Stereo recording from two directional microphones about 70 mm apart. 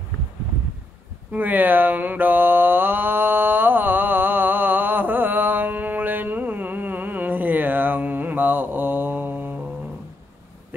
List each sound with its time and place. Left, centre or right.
1.3 s mantra: right